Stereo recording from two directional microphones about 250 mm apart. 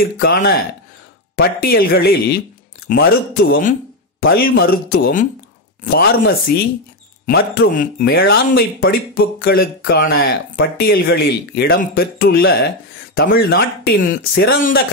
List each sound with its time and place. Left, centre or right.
0.0 s speech: left